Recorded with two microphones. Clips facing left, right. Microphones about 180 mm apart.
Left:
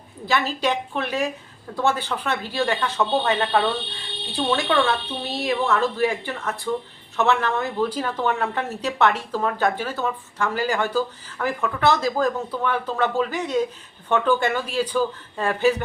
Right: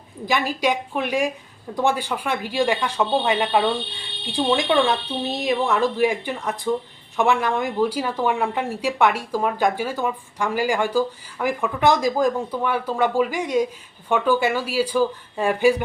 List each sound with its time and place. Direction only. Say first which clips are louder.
0.3 s speech: right 1 dB; 15° right (ahead or behind)